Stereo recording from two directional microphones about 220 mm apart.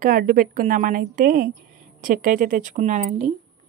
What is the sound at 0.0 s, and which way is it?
A woman's voice, 40° right (ahead or behind).